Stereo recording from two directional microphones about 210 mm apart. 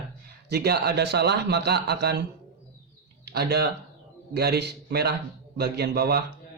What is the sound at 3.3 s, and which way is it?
A man's voice, 50° right (ahead or behind).